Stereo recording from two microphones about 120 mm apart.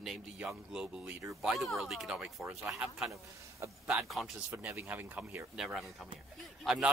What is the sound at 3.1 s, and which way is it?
Speech, 25° right (ahead or behind).